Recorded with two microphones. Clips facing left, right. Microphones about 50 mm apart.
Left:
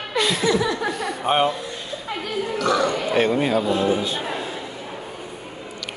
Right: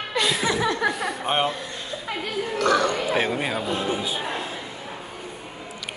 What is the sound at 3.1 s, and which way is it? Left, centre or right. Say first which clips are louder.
Speech: left 5 dB; centre.